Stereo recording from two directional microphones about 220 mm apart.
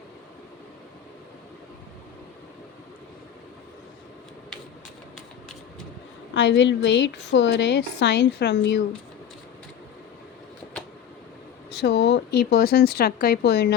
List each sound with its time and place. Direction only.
6.3 s a woman's voice: 55° left (ahead or behind)
11.8 s a woman's voice: 50° left (ahead or behind)